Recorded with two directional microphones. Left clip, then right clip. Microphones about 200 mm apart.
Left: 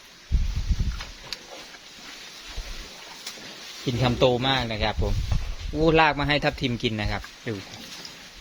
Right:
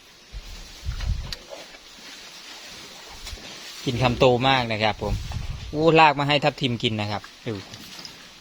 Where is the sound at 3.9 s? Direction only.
30° right (ahead or behind).